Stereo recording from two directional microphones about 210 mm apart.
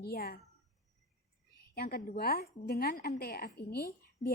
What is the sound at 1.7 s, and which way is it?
A woman's voice, 45° left (ahead or behind).